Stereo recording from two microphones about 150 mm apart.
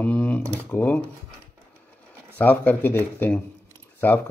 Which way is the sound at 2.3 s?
10° left (ahead or behind).